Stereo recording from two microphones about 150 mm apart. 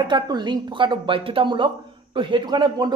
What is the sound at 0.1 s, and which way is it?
Speech, 30° right (ahead or behind).